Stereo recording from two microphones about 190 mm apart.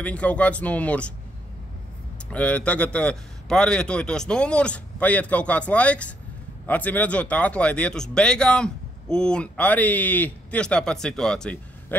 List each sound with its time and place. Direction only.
0.0 s speech: 5° left (ahead or behind)
2.3 s speech: 5° left (ahead or behind)